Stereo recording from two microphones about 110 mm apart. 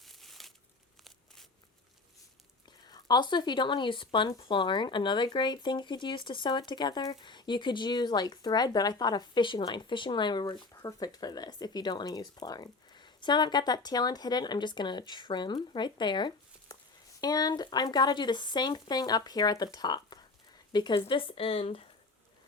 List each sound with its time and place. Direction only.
0.0 s crumpling: centre (ahead or behind)
2.8 s speech: 40° left (ahead or behind); by 21.8 s 60° left (ahead or behind)